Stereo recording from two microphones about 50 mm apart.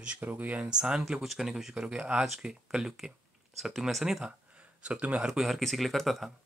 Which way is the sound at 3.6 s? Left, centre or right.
Centre.